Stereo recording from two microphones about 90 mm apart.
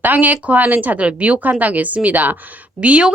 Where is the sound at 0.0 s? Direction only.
20° right (ahead or behind).